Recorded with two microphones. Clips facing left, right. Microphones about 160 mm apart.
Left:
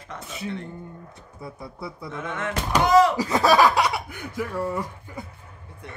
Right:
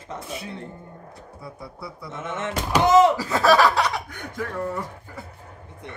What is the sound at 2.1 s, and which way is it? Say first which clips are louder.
Speech: right 1 dB; 25° right (ahead or behind).